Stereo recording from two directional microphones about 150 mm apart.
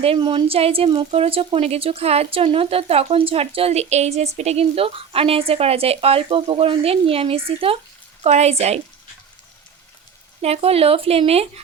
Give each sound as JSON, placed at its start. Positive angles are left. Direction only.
{"t": 0.0, "sound": "a woman's voice", "side_deg": -35}
{"t": 10.4, "sound": "a woman's voice", "side_deg": -45}